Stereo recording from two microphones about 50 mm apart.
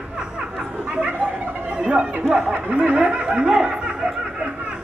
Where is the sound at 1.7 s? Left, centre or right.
Centre.